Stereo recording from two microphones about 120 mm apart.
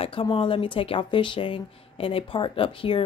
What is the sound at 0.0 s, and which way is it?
Speech, 45° left (ahead or behind).